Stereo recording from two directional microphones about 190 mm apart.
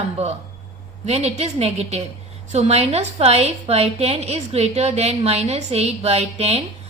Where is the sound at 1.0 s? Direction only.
35° right (ahead or behind).